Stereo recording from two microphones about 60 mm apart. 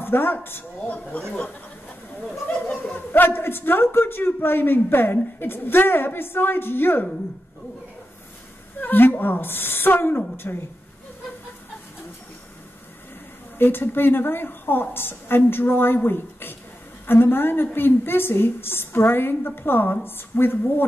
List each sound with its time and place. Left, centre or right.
0.0 s a man's voice: left
0.8 s speech: left
2.4 s a sound: left
3.1 s a man's voice: left
8.8 s a man's voice: left
13.6 s a man's voice: left